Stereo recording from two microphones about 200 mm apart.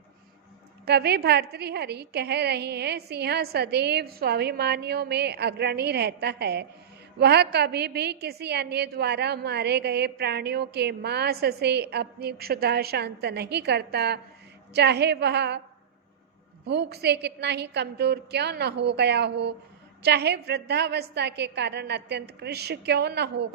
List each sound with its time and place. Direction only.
0.9 s a woman's voice: 55° right (ahead or behind)
16.6 s a woman's voice: 55° right (ahead or behind)